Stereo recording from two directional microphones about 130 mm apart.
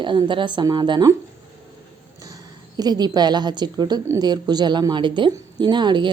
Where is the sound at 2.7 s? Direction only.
30° right (ahead or behind).